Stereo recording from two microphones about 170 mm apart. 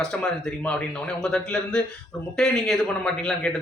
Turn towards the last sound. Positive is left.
turn(degrees=0)  # may be behind; listen again after turning